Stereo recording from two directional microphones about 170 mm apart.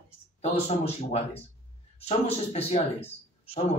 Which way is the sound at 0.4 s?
40° left (ahead or behind).